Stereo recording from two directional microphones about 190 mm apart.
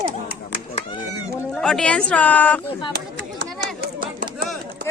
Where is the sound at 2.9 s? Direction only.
60° right (ahead or behind).